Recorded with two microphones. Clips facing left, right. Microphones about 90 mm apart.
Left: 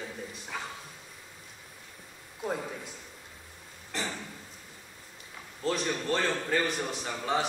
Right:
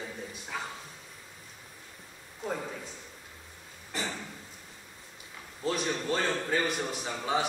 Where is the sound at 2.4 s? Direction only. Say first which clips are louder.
Left 1 dB; 5° left (ahead or behind).